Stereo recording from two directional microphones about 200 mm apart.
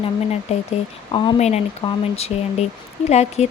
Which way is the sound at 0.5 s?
35° left (ahead or behind).